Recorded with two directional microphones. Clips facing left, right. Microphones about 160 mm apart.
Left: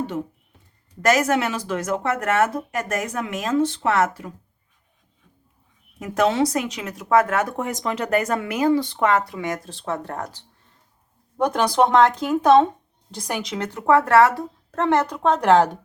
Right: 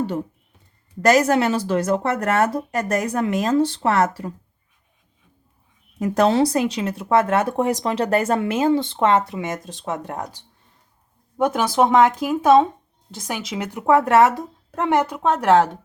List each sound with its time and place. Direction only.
1.0 s a woman's voice: 35° right (ahead or behind)
6.0 s speech: 35° right (ahead or behind); by 10.2 s 15° right (ahead or behind)
11.3 s a woman's voice: 5° right (ahead or behind)